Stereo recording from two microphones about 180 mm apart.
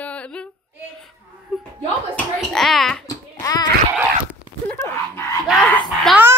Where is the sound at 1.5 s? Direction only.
Centre (ahead or behind).